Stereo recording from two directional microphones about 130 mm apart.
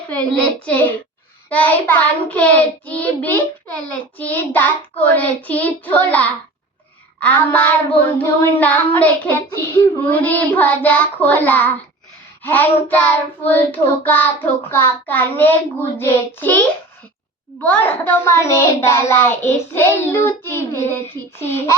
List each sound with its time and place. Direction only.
0.1 s child singing: 10° left (ahead or behind)
17.6 s a child's voice: 15° left (ahead or behind)